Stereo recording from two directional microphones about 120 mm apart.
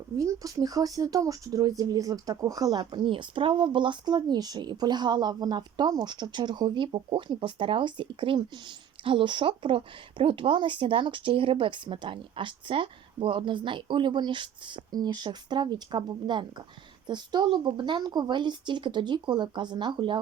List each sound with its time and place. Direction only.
0.2 s speech: 25° right (ahead or behind)